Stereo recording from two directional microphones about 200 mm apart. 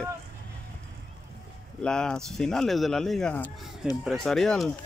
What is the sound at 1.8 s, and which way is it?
Speech, 5° left (ahead or behind).